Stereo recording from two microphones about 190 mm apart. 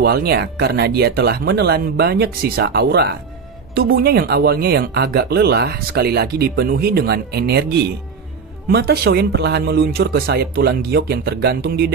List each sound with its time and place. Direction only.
0.0 s speech: 55° right (ahead or behind)